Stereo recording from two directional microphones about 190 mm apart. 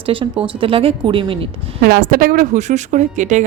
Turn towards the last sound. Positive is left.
turn(degrees=-40)  # may be behind; listen again after turning